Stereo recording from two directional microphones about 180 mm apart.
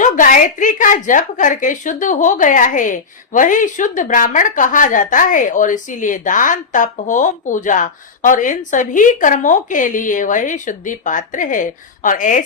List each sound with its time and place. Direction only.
0.0 s a woman's voice: 45° left (ahead or behind)